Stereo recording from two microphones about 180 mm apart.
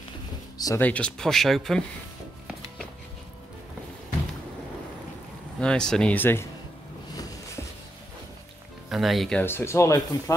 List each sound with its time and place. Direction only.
0.6 s speech: 20° left (ahead or behind)
0.8 s speech: 5° left (ahead or behind)
5.6 s speech: 5° left (ahead or behind)
8.8 s speech: centre (ahead or behind)
9.4 s speech: 15° left (ahead or behind)